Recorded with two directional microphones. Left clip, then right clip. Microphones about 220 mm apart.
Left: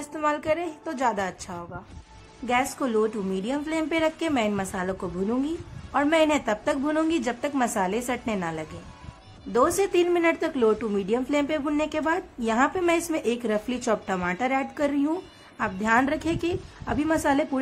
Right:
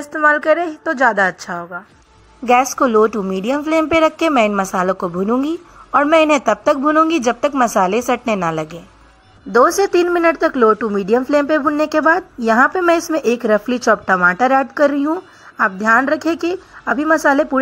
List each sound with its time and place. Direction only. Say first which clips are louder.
0.3 s speech: right 11 dB; 20° right (ahead or behind)